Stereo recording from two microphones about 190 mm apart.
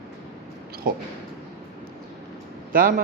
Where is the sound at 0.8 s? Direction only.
50° right (ahead or behind).